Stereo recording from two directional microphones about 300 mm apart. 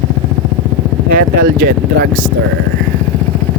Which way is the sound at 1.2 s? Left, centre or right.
Right.